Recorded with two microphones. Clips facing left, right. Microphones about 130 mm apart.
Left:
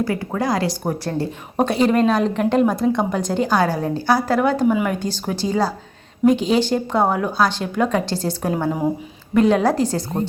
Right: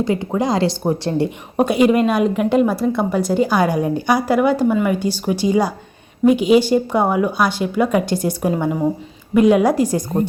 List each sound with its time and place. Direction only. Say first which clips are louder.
0.0 s speech: right 3 dB; 20° right (ahead or behind)
1.5 s a woman's voice: right 3 dB; 10° right (ahead or behind)
4.7 s speech: right 2 dB; centre (ahead or behind)
4.9 s a woman's voice: right 4 dB; 10° right (ahead or behind)